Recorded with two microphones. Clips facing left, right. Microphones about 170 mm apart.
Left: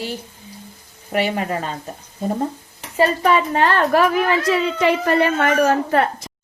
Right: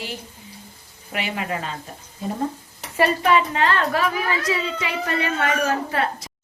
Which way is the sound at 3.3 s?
50° left (ahead or behind).